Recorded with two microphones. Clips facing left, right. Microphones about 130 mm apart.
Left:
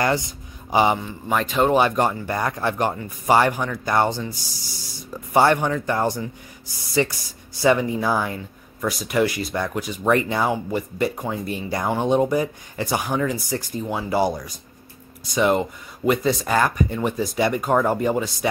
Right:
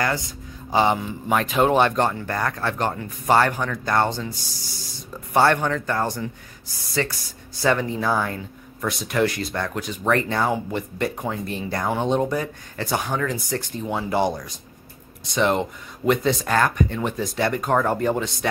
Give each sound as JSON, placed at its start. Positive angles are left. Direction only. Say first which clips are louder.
{"t": 0.7, "sound": "speech", "louder": "left 1 dB", "side_deg": 15}
{"t": 0.9, "sound": "speech", "louder": "right 1 dB", "side_deg": 0}
{"t": 5.3, "sound": "speech", "louder": "left 1 dB", "side_deg": 10}